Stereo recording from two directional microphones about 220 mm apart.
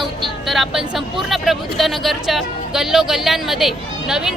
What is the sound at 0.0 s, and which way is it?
Speech, centre (ahead or behind).